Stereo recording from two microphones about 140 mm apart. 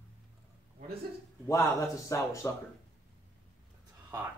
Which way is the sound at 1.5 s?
20° left (ahead or behind).